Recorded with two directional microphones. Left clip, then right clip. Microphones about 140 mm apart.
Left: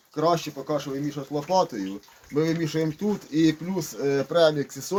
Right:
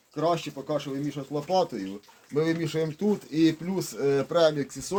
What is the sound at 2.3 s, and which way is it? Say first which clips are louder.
Speech: left 1 dB; 60° right (ahead or behind).